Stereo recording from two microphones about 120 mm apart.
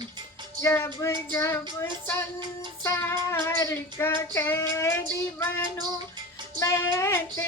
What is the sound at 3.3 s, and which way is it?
Child singing, 25° left (ahead or behind).